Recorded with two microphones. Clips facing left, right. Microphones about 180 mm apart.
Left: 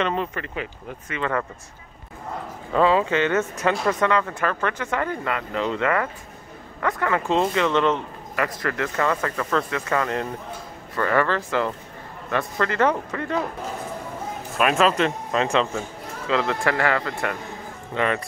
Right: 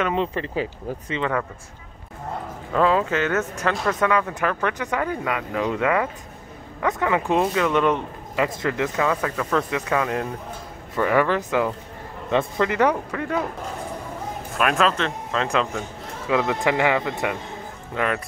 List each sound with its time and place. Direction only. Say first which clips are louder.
0.1 s speech: right 3 dB; 25° right (ahead or behind)
2.7 s speech: left 1 dB; centre (ahead or behind); by 8.9 s 15° right (ahead or behind)
8.9 s speech: right 1 dB; 5° right (ahead or behind)
14.6 s speech: left 2 dB; centre (ahead or behind)
16.3 s speech: right 1 dB; 15° right (ahead or behind)
17.9 s speech: left 1 dB; 5° right (ahead or behind)